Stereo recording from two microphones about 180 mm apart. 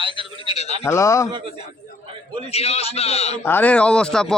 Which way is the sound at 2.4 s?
35° left (ahead or behind).